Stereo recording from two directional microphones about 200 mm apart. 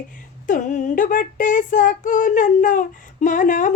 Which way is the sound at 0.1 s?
40° left (ahead or behind).